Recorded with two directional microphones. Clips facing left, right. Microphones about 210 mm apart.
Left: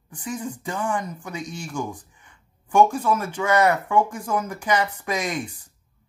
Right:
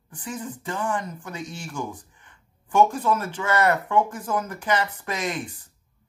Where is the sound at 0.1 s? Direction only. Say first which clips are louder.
Left 3 dB; 15° left (ahead or behind).